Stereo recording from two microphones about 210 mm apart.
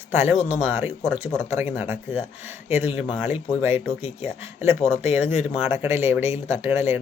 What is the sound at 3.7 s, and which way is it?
Speech, 30° left (ahead or behind).